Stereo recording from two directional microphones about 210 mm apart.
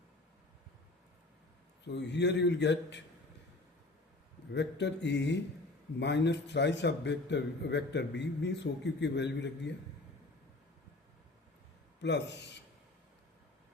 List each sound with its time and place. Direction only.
1.9 s a man's voice: 55° left (ahead or behind)
4.5 s a man's voice: 55° left (ahead or behind)
12.0 s a man's voice: 55° left (ahead or behind)